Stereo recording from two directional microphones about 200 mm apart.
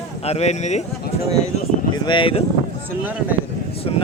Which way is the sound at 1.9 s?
25° left (ahead or behind).